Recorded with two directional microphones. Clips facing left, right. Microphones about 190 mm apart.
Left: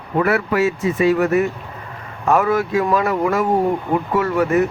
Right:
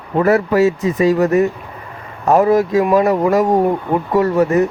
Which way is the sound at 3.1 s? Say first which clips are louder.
Right 4 dB; 35° right (ahead or behind).